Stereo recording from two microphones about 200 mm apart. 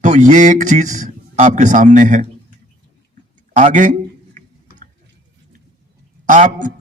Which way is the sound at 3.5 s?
40° right (ahead or behind).